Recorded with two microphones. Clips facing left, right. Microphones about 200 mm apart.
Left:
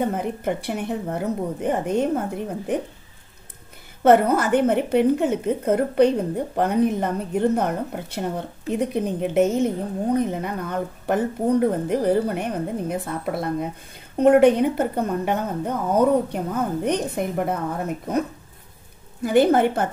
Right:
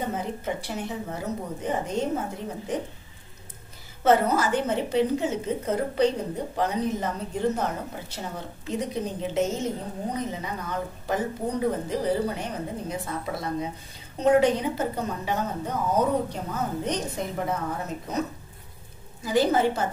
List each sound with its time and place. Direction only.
0.1 s a woman's voice: 60° left (ahead or behind)
4.0 s a woman's voice: 55° left (ahead or behind)
19.2 s a woman's voice: 60° left (ahead or behind)